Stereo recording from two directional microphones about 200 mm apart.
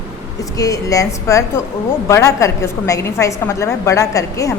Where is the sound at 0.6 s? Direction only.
15° left (ahead or behind).